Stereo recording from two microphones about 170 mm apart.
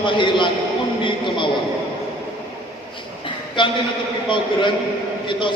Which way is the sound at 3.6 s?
30° left (ahead or behind).